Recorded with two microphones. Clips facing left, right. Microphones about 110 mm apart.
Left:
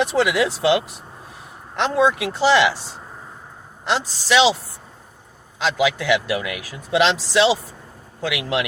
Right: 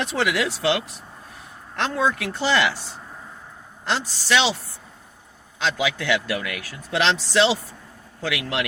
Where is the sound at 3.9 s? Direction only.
15° left (ahead or behind).